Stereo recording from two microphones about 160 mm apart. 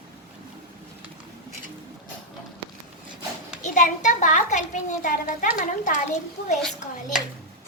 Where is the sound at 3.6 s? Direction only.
50° left (ahead or behind).